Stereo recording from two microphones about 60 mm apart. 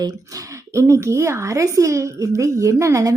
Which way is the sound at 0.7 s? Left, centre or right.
Right.